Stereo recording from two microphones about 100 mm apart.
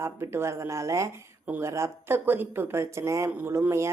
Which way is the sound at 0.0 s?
25° right (ahead or behind).